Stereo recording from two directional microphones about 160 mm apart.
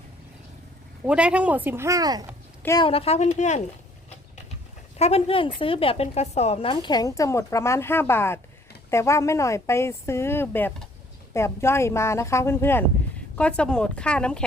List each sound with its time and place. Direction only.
1.0 s speech: 5° right (ahead or behind); by 2.3 s 25° right (ahead or behind)
2.8 s speech: 40° left (ahead or behind)
4.9 s speech: 40° left (ahead or behind); by 14.4 s 5° left (ahead or behind)